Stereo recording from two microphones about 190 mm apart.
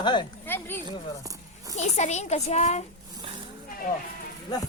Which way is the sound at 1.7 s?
35° left (ahead or behind).